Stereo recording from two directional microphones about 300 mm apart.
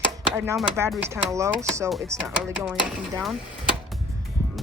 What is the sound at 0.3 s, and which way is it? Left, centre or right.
Speech, centre.